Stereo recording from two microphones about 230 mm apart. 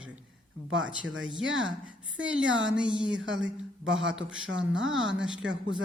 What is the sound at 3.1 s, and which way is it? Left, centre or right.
Speech, right.